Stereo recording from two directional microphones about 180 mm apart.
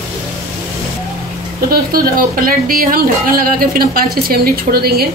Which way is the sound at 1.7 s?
55° right (ahead or behind).